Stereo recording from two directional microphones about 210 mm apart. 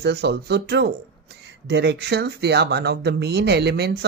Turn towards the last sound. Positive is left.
turn(degrees=-50)  # may be behind; listen again after turning